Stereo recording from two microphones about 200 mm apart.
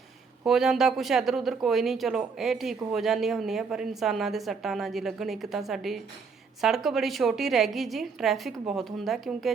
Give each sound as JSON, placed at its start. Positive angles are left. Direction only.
{"t": 0.4, "sound": "speech", "side_deg": 0}